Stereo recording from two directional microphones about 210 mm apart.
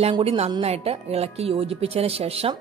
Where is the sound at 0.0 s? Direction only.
25° right (ahead or behind).